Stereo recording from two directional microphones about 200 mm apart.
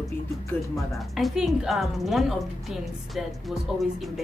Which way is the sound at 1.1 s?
Centre (ahead or behind).